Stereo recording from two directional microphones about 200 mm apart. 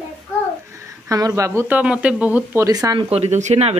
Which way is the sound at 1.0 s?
15° right (ahead or behind).